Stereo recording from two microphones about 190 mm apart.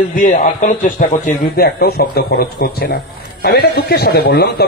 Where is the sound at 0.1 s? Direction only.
45° left (ahead or behind).